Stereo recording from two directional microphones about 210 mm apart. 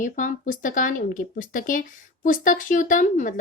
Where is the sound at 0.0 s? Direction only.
40° left (ahead or behind).